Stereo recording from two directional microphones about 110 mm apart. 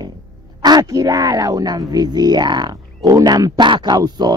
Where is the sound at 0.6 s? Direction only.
40° right (ahead or behind).